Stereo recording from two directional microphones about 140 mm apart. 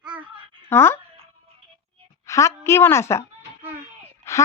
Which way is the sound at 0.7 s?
15° left (ahead or behind).